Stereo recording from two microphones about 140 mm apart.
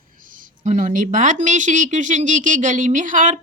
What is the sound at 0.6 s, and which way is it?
Speech, 60° right (ahead or behind).